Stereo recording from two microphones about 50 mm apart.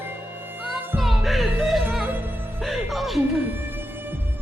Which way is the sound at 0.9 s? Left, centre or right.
Centre.